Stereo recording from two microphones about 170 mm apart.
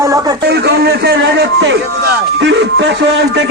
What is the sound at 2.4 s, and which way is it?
Music, 90° right.